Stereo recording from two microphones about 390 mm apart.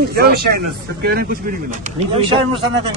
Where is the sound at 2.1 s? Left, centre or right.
Centre.